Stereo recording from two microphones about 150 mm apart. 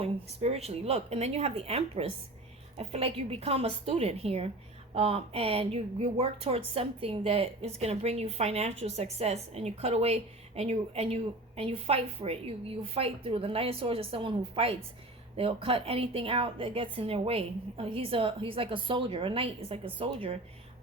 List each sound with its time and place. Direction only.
0.0 s a woman's voice: 45° right (ahead or behind)